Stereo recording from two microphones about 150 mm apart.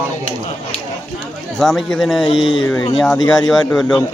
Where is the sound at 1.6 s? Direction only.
5° left (ahead or behind).